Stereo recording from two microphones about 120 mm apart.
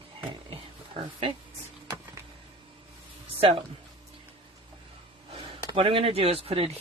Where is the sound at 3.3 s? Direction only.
50° right (ahead or behind).